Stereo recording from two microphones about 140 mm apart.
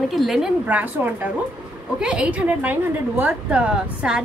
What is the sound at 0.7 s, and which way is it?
A woman's voice, 10° right (ahead or behind).